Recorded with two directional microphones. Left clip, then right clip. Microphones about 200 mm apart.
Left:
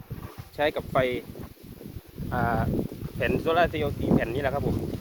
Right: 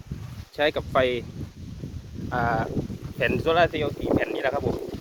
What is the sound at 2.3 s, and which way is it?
Speech, 35° right (ahead or behind).